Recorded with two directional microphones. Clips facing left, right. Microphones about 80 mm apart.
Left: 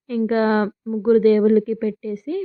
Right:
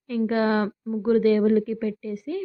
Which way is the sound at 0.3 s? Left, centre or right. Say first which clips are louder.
Left 4 dB; left.